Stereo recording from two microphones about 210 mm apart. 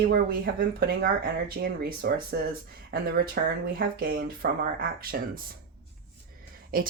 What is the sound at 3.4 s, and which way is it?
Speech, 45° right (ahead or behind).